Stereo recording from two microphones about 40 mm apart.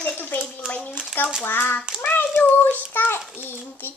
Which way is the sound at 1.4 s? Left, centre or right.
Left.